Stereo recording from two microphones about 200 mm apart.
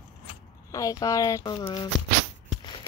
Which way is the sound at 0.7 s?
15° left (ahead or behind).